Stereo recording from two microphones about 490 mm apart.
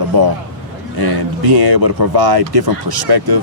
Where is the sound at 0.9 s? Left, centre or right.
Right.